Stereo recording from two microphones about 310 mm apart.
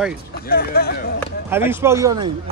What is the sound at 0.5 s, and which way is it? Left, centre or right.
Speech, left.